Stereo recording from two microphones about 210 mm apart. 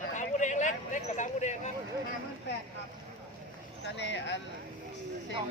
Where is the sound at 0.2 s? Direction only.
35° left (ahead or behind).